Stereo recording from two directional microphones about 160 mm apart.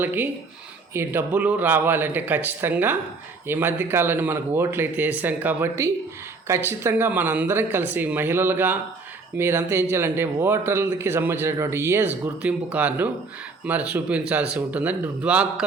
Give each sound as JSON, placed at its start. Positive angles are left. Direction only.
{"t": 0.0, "sound": "speech", "side_deg": -10}